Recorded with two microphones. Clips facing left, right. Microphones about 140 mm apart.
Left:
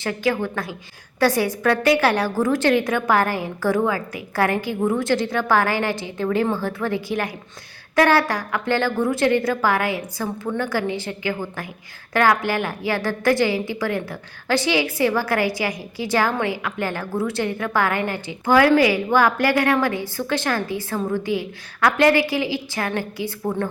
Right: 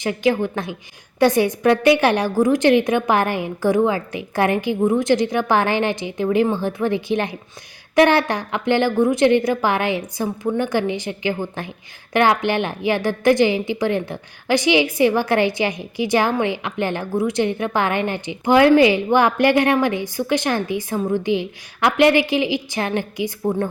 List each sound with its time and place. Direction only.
0.0 s a woman's voice: 20° right (ahead or behind)